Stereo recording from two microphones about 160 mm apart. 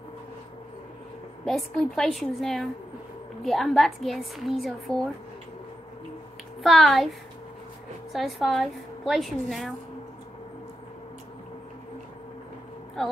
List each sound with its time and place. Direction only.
1.4 s a woman's voice: centre (ahead or behind)
6.6 s a woman's voice: centre (ahead or behind)
8.1 s a woman's voice: centre (ahead or behind)